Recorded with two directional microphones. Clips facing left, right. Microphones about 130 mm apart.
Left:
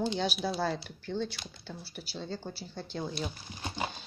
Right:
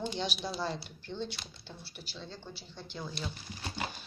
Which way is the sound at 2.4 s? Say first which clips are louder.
Left 6 dB; 40° left (ahead or behind).